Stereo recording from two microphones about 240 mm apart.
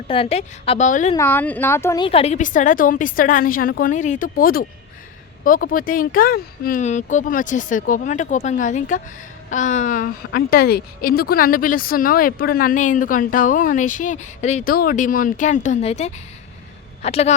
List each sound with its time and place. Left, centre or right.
0.1 s a woman's voice: left
1.1 s a woman's voice: centre; by 17.3 s left